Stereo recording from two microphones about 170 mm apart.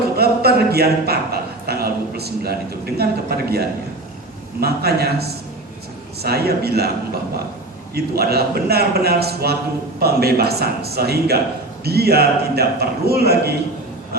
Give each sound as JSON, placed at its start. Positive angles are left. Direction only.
{"t": 0.2, "sound": "a sound", "side_deg": -65}
{"t": 4.6, "sound": "a man's voice", "side_deg": -65}
{"t": 7.9, "sound": "a man's voice", "side_deg": -65}